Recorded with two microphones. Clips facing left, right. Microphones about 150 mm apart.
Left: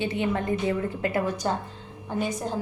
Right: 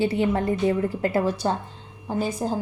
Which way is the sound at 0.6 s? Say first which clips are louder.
Right 4 dB; 30° right (ahead or behind).